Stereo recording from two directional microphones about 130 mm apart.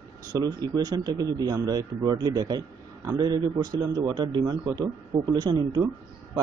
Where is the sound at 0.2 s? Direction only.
30° right (ahead or behind).